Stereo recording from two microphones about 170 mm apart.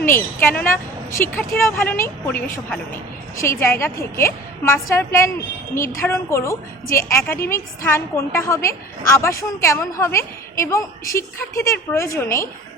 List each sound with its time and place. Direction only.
0.0 s a woman's voice: 15° left (ahead or behind)